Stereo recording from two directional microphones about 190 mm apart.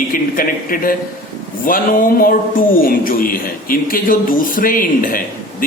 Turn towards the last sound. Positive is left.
turn(degrees=45)  # may be behind; listen again after turning